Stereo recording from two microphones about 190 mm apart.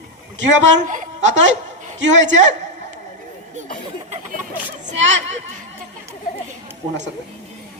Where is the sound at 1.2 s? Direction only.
75° right (ahead or behind).